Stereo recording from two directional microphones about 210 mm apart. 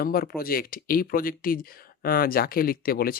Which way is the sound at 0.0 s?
45° left (ahead or behind).